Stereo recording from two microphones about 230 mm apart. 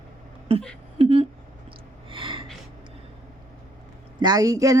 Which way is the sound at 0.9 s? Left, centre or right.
Right.